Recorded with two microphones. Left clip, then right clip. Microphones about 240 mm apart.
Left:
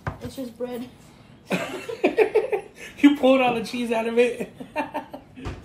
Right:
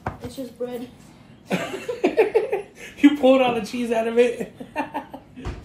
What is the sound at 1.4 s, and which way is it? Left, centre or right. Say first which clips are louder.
Speech: right 1 dB; centre.